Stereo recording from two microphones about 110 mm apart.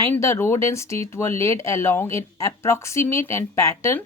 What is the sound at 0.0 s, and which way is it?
A woman's voice, 25° left (ahead or behind).